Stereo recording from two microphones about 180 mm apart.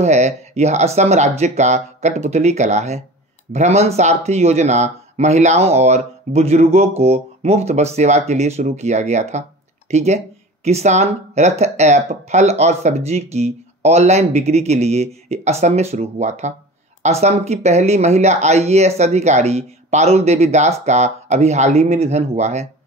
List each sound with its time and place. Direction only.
0.0 s speech: 40° right (ahead or behind)